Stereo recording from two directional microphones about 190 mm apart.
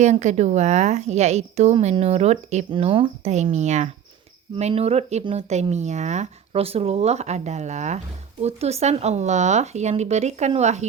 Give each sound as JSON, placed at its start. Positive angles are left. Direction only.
{"t": 0.0, "sound": "speech", "side_deg": -40}